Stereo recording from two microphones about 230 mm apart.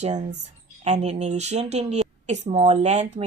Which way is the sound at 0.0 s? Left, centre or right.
Right.